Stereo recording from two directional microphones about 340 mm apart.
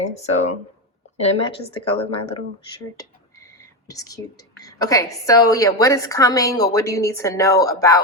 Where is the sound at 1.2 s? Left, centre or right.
Centre.